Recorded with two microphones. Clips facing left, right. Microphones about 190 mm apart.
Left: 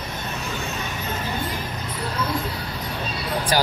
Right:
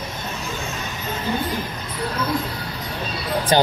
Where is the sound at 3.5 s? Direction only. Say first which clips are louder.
Right 5 dB; 25° right (ahead or behind).